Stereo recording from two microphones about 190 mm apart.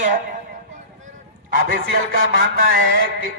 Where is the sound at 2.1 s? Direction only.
50° right (ahead or behind).